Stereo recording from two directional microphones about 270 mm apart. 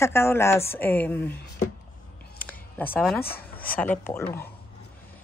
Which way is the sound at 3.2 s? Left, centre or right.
Left.